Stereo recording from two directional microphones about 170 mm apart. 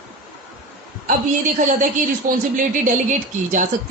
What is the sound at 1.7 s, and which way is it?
Speech, 55° right (ahead or behind).